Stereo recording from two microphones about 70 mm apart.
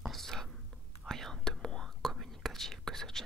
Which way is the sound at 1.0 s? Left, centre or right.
Centre.